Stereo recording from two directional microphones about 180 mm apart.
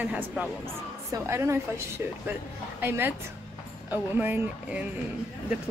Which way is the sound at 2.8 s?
10° right (ahead or behind).